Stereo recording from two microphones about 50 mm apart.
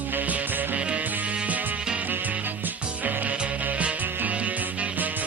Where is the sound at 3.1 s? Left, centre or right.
Right.